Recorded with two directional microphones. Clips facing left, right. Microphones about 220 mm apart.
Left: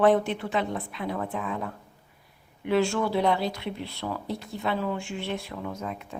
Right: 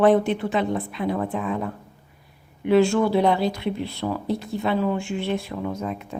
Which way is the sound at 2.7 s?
20° right (ahead or behind).